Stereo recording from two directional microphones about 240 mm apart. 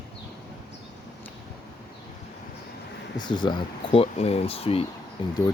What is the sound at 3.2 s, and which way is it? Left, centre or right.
Speech, centre.